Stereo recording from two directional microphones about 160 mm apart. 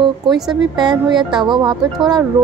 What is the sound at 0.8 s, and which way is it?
Speech, 25° right (ahead or behind).